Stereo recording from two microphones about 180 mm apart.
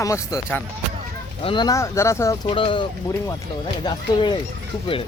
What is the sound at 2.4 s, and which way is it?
Speech, 30° left (ahead or behind).